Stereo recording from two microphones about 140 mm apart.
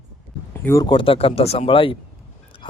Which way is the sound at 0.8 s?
35° left (ahead or behind).